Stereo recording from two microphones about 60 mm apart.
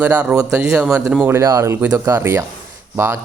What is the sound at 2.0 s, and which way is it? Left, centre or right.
Speech, right.